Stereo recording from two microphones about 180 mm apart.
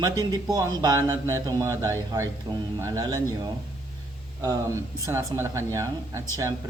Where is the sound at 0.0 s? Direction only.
20° right (ahead or behind).